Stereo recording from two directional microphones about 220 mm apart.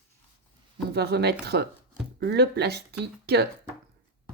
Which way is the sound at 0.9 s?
50° right (ahead or behind).